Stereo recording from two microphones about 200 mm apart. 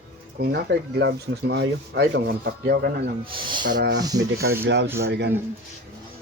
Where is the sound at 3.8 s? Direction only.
55° right (ahead or behind).